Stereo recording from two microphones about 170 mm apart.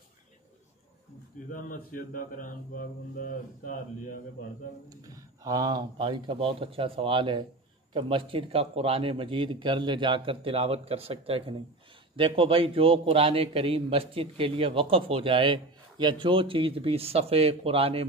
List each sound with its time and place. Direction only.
1.5 s speech: 55° left (ahead or behind)
4.8 s a man's voice: 20° right (ahead or behind)